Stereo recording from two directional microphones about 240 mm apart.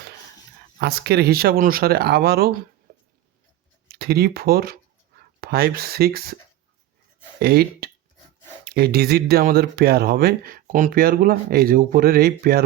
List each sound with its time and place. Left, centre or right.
0.8 s speech: right
2.9 s a sound: right
3.8 s speech: right
7.3 s speech: right